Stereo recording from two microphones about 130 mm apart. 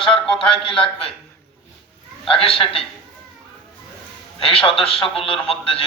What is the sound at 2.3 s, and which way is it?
Speech, 45° left (ahead or behind).